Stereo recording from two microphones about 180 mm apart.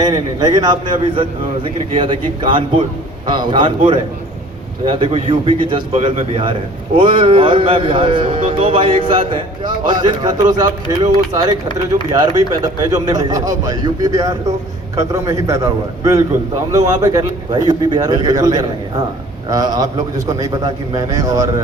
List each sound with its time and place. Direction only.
0.0 s a man's voice: 20° right (ahead or behind)